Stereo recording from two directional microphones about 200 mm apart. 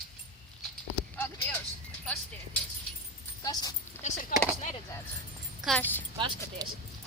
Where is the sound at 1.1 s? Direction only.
10° left (ahead or behind).